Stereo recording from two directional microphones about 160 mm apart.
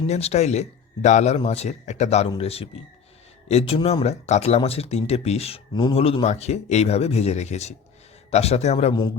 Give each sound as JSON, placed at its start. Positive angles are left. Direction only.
{"t": 0.1, "sound": "speech", "side_deg": 40}
{"t": 8.9, "sound": "a man's voice", "side_deg": 25}